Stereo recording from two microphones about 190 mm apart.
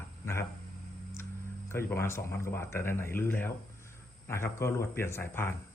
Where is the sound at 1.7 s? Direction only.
10° left (ahead or behind).